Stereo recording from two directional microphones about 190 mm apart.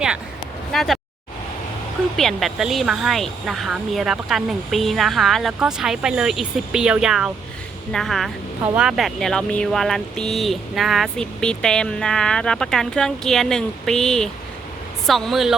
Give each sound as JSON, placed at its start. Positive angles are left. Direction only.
{"t": 0.7, "sound": "speech", "side_deg": 0}
{"t": 2.1, "sound": "speech", "side_deg": 0}